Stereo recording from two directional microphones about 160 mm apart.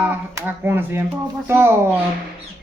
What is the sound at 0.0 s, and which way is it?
A woman's voice, 10° right (ahead or behind).